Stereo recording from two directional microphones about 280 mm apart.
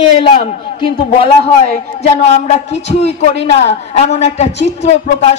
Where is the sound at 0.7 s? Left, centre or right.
Left.